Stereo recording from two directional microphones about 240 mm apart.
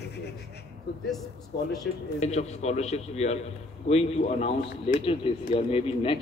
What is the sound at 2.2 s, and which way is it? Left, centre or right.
Speech, left.